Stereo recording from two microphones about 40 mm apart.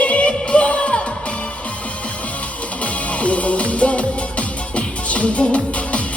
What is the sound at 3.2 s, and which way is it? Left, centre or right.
Music, left.